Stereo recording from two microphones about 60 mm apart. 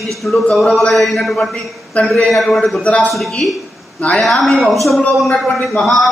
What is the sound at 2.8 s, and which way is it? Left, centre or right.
Speech, left.